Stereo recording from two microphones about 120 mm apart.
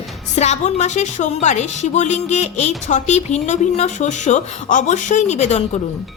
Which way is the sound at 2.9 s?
85° left.